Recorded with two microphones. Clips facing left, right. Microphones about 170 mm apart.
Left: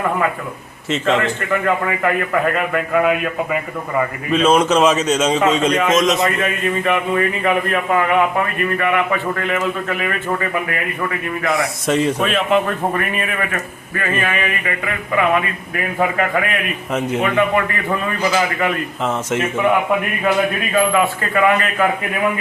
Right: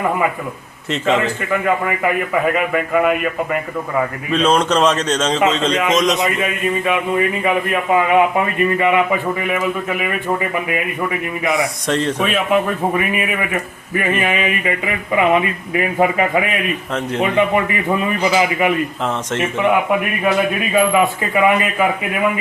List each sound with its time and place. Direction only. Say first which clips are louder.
0.9 s a man's voice: even; centre (ahead or behind)
7.4 s a man's voice: even; 15° right (ahead or behind)
11.4 s a man's voice: even; centre (ahead or behind); by 18.8 s 15° right (ahead or behind)
20.7 s a man's voice: right 2 dB; 15° right (ahead or behind)